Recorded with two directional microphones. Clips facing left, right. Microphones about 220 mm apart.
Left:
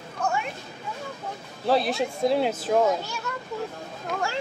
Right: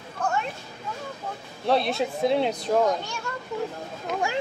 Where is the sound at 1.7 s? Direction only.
Centre (ahead or behind).